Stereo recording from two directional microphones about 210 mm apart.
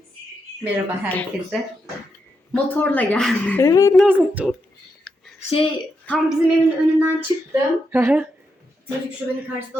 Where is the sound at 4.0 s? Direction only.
5° right (ahead or behind).